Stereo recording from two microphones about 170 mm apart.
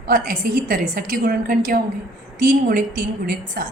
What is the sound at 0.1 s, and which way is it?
A woman's voice, 55° right (ahead or behind).